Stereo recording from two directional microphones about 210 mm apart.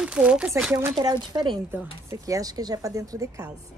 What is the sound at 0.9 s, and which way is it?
A woman's voice, 20° right (ahead or behind).